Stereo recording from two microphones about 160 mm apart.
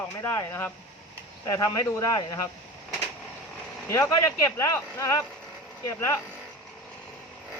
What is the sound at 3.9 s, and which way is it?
Speech, 20° left (ahead or behind).